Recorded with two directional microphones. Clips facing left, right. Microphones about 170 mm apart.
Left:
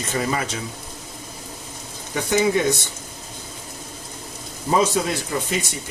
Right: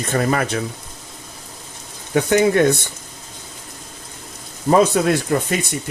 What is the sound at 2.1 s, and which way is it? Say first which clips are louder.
Speech: right 4 dB; 60° right (ahead or behind).